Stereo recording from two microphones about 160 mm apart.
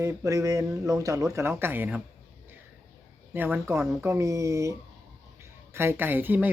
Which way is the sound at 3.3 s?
15° right (ahead or behind).